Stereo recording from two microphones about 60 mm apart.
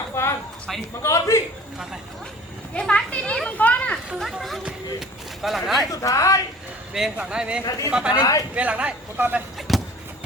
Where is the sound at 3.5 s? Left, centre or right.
Left.